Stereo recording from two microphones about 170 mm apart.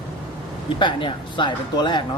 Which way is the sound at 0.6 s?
30° left (ahead or behind).